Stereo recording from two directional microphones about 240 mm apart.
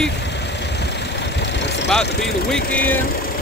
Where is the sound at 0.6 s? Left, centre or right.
Left.